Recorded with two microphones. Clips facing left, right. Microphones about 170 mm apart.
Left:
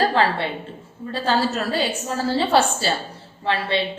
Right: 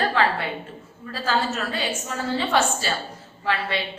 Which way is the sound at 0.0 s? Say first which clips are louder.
Left 3 dB; 35° left (ahead or behind).